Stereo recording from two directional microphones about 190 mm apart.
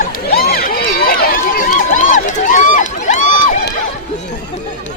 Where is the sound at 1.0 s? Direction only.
50° left (ahead or behind).